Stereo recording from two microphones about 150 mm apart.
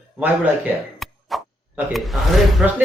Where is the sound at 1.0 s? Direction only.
Centre (ahead or behind).